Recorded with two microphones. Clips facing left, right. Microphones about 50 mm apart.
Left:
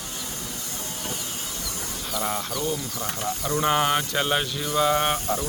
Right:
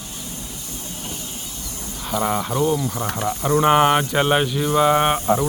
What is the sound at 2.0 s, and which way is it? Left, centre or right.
Speech, centre.